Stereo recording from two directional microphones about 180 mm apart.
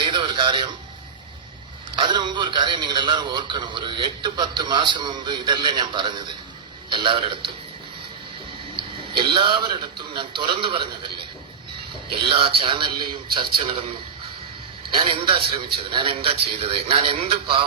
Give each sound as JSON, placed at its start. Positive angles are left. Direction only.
{"t": 0.0, "sound": "a sound", "side_deg": -25}
{"t": 2.0, "sound": "a man's voice", "side_deg": -25}
{"t": 8.7, "sound": "a sound", "side_deg": -30}
{"t": 10.2, "sound": "a man's voice", "side_deg": -25}
{"t": 12.2, "sound": "a man's voice", "side_deg": -30}
{"t": 14.9, "sound": "a man's voice", "side_deg": -30}